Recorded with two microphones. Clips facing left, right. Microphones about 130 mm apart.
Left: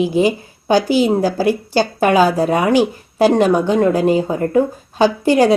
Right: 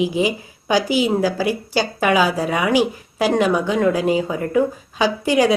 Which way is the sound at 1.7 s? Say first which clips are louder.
Left 4 dB; 35° left (ahead or behind).